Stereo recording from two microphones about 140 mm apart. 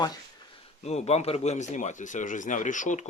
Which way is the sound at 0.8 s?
50° left (ahead or behind).